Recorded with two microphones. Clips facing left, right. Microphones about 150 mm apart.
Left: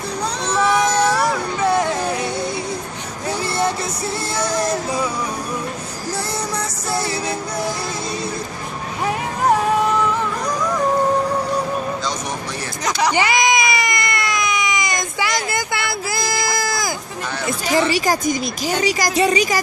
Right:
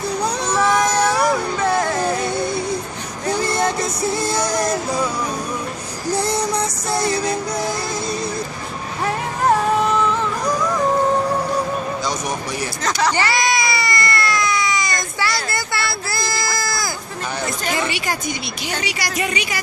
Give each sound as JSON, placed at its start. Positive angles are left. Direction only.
{"t": 0.6, "sound": "cat", "side_deg": 10}
{"t": 1.2, "sound": "a sound", "side_deg": 10}
{"t": 4.0, "sound": "music", "side_deg": -15}
{"t": 6.1, "sound": "music", "side_deg": -20}
{"t": 13.0, "sound": "baby cry", "side_deg": 15}
{"t": 17.7, "sound": "a woman's voice", "side_deg": 40}